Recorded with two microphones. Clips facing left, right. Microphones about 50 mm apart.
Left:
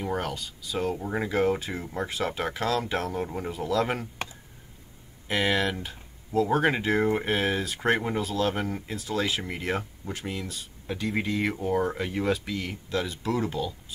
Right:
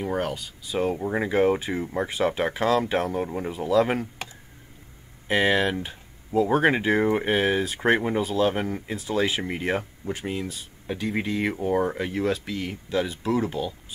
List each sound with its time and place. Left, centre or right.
0.0 s speech: centre
5.3 s speech: centre
11.9 s speech: centre